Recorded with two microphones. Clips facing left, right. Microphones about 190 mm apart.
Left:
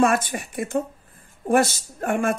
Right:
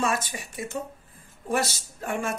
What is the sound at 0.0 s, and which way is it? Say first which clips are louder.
Speech: left 8 dB; 55° left (ahead or behind).